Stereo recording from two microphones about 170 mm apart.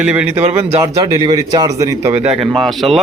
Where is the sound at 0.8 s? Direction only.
20° right (ahead or behind).